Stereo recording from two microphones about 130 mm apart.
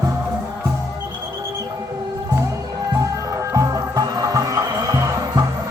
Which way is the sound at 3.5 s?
30° right (ahead or behind).